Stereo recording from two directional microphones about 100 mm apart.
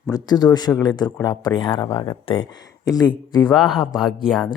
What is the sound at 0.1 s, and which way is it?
Speech, 45° left (ahead or behind).